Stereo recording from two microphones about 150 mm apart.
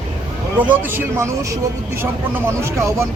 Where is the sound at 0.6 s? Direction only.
10° right (ahead or behind).